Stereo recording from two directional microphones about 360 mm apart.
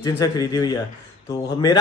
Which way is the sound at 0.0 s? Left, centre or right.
Centre.